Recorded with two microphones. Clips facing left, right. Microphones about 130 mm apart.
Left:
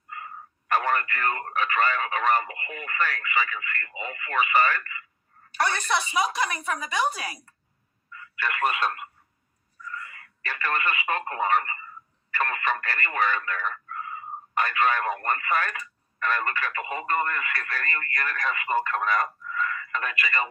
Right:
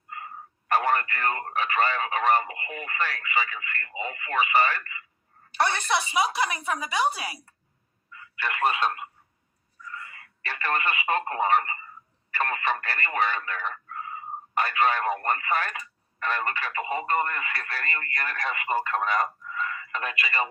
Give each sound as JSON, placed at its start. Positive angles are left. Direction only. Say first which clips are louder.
{"t": 0.9, "sound": "speech", "louder": "right 1 dB", "side_deg": -30}
{"t": 6.1, "sound": "speech", "louder": "right 1 dB", "side_deg": -15}
{"t": 8.1, "sound": "speech", "louder": "left 1 dB", "side_deg": -30}
{"t": 10.1, "sound": "a sound", "louder": "left 1 dB", "side_deg": -35}
{"t": 10.8, "sound": "speech", "louder": "right 2 dB", "side_deg": -25}